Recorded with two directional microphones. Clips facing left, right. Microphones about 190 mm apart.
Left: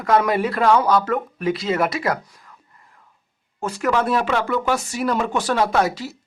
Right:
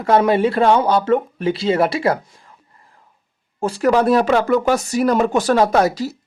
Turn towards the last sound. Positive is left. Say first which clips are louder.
# right 4 dB
turn(degrees=-40)  # may be behind; listen again after turning